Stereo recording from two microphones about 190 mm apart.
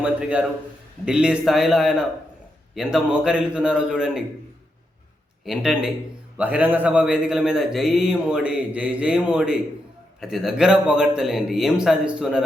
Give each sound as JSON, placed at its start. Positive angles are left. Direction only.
{"t": 0.0, "sound": "a man's voice", "side_deg": -5}
{"t": 5.5, "sound": "a man's voice", "side_deg": 0}